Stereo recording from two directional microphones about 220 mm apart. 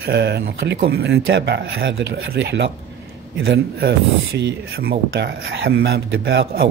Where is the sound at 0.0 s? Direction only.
50° right (ahead or behind).